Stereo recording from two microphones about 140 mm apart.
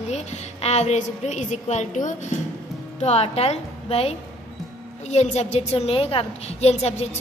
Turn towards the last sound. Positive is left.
turn(degrees=50)  # may be behind; listen again after turning